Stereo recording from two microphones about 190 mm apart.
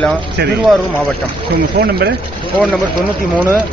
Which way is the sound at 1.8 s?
55° right (ahead or behind).